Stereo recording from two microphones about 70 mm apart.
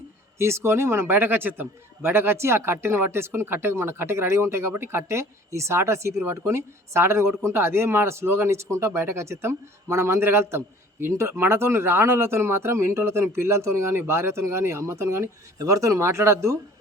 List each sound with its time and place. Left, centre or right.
0.3 s a man's voice: right